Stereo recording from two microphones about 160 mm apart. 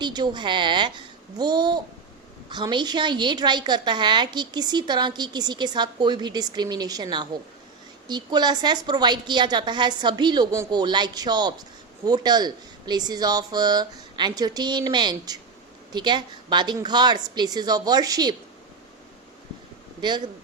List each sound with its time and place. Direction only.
0.0 s a woman's voice: 25° right (ahead or behind)
20.0 s a woman's voice: 30° right (ahead or behind)